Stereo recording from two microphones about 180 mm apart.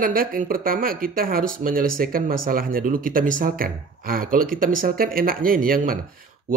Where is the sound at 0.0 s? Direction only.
50° right (ahead or behind).